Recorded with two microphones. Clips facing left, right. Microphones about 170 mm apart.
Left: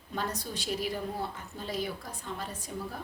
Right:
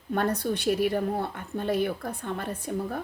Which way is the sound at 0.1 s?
60° right (ahead or behind).